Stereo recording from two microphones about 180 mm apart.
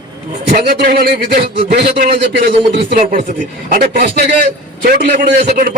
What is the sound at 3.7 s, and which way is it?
A man's voice, 60° right (ahead or behind).